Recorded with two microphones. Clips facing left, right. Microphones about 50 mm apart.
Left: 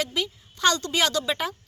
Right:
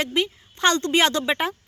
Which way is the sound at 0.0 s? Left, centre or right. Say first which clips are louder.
Right 4 dB; right.